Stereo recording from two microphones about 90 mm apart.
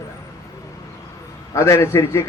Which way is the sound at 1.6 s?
30° left (ahead or behind).